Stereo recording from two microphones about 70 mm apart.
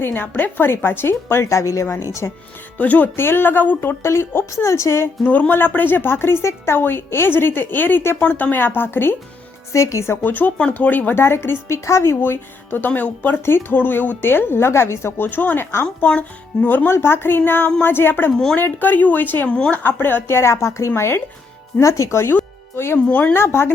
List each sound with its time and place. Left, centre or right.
0.0 s speech: left
2.7 s speech: left
5.2 s speech: left
9.7 s speech: left
10.3 s speech: left
11.1 s speech: left
12.2 s speech: left
15.3 s speech: left
19.5 s speech: centre
19.8 s speech: left
22.4 s music: left
23.0 s speech: left
23.3 s speech: left